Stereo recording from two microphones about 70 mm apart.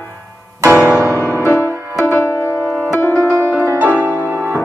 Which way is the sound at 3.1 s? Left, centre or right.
Right.